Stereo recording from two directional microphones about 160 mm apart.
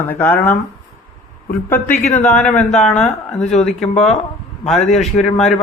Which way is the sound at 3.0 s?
5° left (ahead or behind).